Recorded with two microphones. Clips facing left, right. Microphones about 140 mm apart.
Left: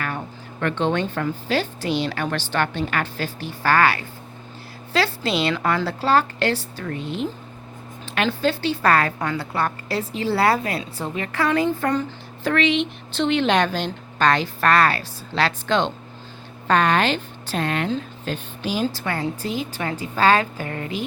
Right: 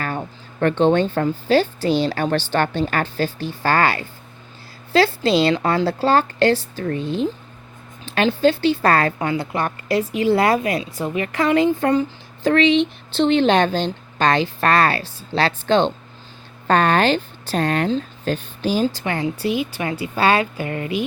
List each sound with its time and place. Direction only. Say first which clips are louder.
0.6 s a woman's voice: right 6 dB; 35° right (ahead or behind)
9.3 s a woman's voice: right 2 dB; 15° right (ahead or behind)
12.5 s a woman's voice: right 5 dB; 30° right (ahead or behind)
18.9 s a woman's voice: right 3 dB; 20° right (ahead or behind)